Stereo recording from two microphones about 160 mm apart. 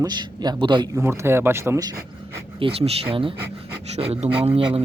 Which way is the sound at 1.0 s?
15° right (ahead or behind).